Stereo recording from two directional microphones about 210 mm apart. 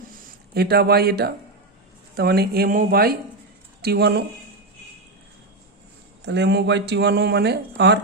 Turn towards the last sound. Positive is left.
turn(degrees=-55)  # may be behind; listen again after turning